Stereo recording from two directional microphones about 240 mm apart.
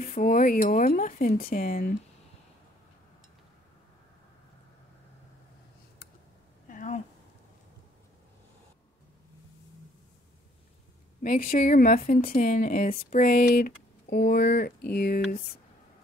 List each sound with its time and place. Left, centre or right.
0.0 s speech: left
6.7 s a sound: left
11.2 s speech: left